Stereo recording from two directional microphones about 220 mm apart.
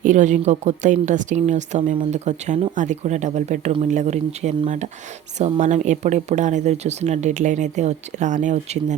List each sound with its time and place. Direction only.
0.0 s speech: 35° right (ahead or behind)